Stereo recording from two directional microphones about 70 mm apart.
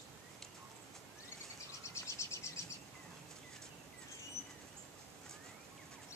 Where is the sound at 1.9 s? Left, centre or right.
Left.